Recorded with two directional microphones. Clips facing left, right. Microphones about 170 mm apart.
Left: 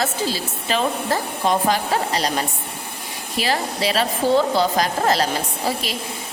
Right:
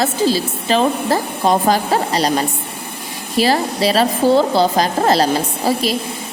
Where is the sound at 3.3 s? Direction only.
35° right (ahead or behind).